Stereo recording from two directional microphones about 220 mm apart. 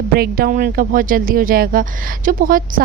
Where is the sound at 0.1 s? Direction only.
45° right (ahead or behind).